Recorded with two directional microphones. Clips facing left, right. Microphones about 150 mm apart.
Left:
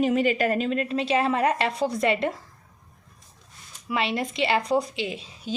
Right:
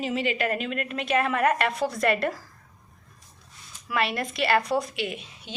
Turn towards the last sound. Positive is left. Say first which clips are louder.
# left 4 dB
turn(degrees=30)  # may be behind; listen again after turning